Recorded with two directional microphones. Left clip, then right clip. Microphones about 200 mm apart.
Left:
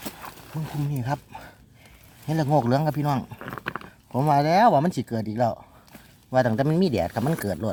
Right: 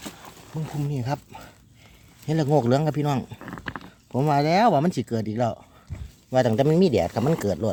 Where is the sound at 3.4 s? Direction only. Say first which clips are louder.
Left 2 dB; 30° left (ahead or behind).